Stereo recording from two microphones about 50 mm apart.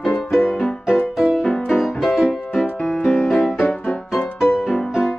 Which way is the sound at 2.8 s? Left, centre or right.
Left.